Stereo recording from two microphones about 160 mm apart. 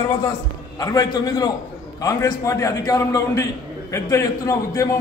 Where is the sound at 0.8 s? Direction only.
25° left (ahead or behind).